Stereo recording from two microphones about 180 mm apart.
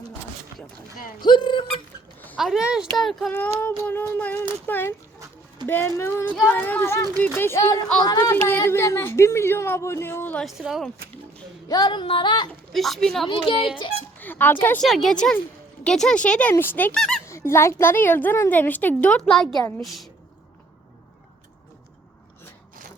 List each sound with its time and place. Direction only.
1.2 s speech: 25° left (ahead or behind)
2.4 s speech: 5° right (ahead or behind)
11.7 s speech: 25° left (ahead or behind)
12.7 s speech: centre (ahead or behind)
13.2 s speech: 30° left (ahead or behind)
14.2 s speech: 10° left (ahead or behind)
17.2 s speech: 15° left (ahead or behind)